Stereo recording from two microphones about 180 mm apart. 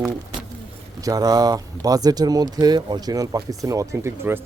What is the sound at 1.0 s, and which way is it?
Speech, 20° right (ahead or behind).